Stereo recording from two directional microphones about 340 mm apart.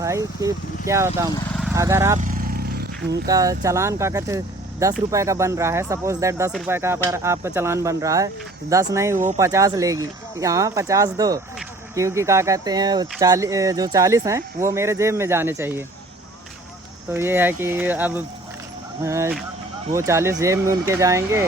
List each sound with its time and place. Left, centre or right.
0.0 s speech: centre
2.1 s vehicle: right
3.1 s speech: centre
9.1 s speech: right
9.4 s speech: centre
17.1 s speech: centre